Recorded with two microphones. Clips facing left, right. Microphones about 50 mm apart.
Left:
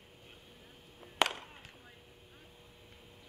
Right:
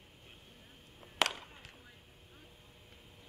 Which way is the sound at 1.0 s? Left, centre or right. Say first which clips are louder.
Left 2 dB; centre.